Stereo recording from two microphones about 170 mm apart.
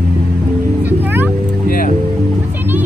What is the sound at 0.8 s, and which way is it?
Music, 10° right (ahead or behind).